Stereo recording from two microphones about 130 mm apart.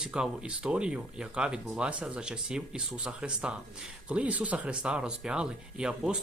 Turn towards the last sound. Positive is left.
turn(degrees=-5)  # may be behind; listen again after turning